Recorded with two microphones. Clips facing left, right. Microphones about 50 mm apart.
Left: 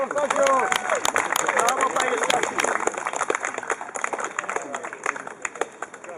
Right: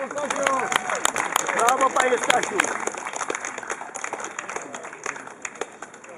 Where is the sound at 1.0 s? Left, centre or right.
Centre.